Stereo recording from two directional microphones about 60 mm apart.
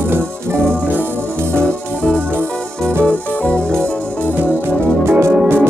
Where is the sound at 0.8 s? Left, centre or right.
Right.